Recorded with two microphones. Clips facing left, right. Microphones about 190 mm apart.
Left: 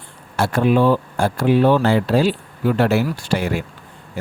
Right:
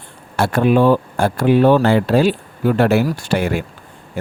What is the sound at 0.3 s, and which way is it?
Speech, 55° right (ahead or behind).